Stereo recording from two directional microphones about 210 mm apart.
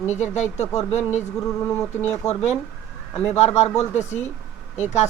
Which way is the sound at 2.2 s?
30° left (ahead or behind).